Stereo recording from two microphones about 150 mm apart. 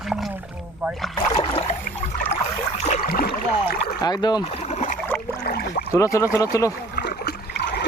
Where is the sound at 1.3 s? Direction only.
40° left (ahead or behind).